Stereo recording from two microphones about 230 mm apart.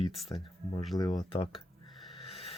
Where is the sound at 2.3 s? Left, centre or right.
Left.